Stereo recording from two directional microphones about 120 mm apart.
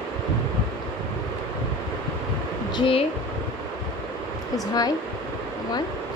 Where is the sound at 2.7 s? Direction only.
45° left (ahead or behind).